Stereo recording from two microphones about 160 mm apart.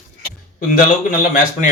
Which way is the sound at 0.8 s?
55° left (ahead or behind).